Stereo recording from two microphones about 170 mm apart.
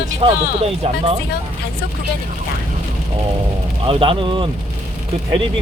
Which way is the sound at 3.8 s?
30° right (ahead or behind).